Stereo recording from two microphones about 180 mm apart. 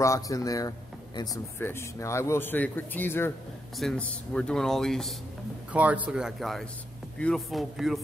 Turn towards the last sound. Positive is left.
turn(degrees=0)  # may be behind; listen again after turning